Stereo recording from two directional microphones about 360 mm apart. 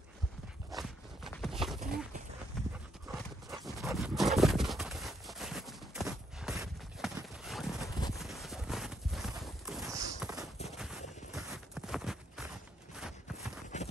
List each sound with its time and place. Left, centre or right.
0.7 s walk: centre
2.5 s horse: centre
8.1 s clip-clop: centre
9.4 s walk: centre
10.8 s clip-clop: centre
13.7 s clip-clop: centre